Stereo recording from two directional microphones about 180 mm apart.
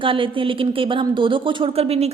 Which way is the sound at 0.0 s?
30° right (ahead or behind).